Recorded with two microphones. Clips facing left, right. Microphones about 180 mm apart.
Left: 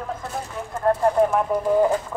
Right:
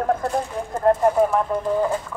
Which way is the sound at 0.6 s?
35° right (ahead or behind).